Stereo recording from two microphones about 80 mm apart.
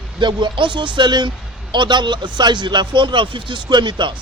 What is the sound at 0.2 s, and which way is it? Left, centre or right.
Speech, right.